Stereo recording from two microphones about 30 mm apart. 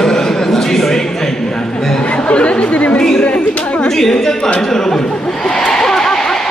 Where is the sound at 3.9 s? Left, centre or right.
Centre.